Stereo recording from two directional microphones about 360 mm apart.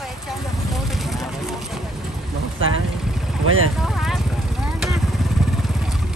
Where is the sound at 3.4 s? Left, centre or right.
Right.